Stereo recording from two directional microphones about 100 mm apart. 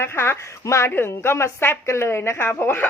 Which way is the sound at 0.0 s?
25° left (ahead or behind).